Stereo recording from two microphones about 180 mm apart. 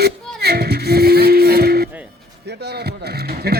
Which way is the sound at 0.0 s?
65° right (ahead or behind).